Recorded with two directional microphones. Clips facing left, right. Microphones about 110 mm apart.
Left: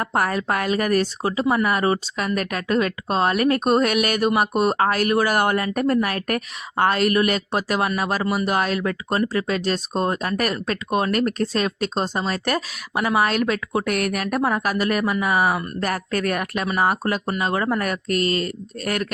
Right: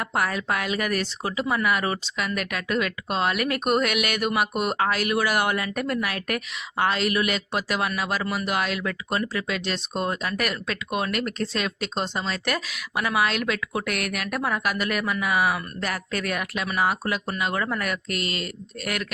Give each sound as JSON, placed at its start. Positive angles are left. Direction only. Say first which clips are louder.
{"t": 0.0, "sound": "speech", "louder": "left 4 dB", "side_deg": 40}